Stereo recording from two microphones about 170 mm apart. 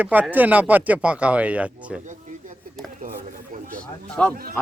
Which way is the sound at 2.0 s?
50° right (ahead or behind).